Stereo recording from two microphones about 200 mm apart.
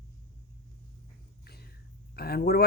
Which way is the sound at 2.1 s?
50° left (ahead or behind).